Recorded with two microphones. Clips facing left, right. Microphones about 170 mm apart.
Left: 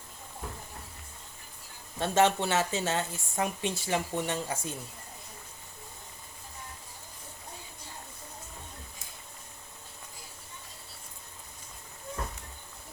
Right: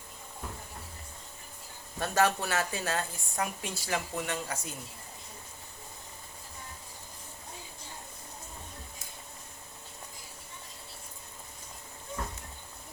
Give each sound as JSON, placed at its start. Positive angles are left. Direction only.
{"t": 2.0, "sound": "a woman's voice", "side_deg": 25}